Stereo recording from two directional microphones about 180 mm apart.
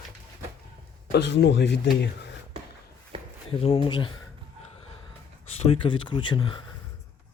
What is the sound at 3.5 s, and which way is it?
Speech, 30° left (ahead or behind).